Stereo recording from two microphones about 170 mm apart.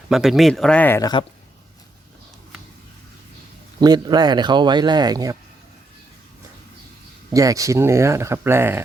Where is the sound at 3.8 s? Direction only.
25° right (ahead or behind).